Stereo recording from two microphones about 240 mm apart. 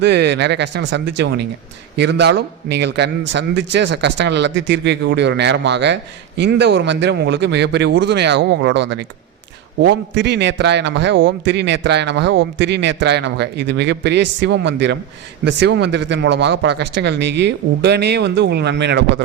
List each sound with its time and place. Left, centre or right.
0.0 s a man's voice: right